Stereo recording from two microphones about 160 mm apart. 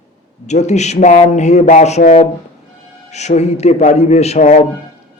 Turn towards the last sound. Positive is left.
turn(degrees=50)  # may be behind; listen again after turning